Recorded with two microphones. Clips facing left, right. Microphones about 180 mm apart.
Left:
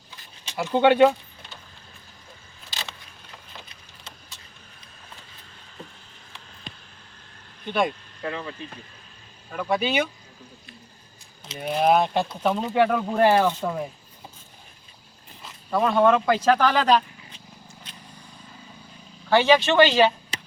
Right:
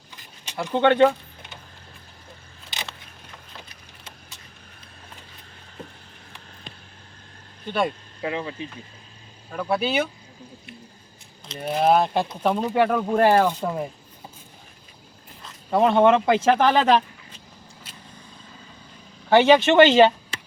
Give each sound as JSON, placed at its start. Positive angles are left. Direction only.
{"t": 0.5, "sound": "speech", "side_deg": 10}
{"t": 7.7, "sound": "speech", "side_deg": 0}
{"t": 8.2, "sound": "speech", "side_deg": -15}
{"t": 9.5, "sound": "speech", "side_deg": 0}
{"t": 11.4, "sound": "speech", "side_deg": 0}
{"t": 13.4, "sound": "speech", "side_deg": -10}
{"t": 15.7, "sound": "speech", "side_deg": -25}
{"t": 17.9, "sound": "vehicle", "side_deg": -5}
{"t": 19.3, "sound": "speech", "side_deg": -20}